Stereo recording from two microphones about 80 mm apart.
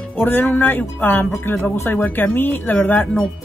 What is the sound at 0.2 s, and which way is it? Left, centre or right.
Speech, left.